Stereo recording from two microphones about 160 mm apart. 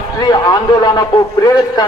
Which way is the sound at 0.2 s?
25° left (ahead or behind).